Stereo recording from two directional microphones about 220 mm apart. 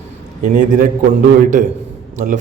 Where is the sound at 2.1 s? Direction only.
35° right (ahead or behind).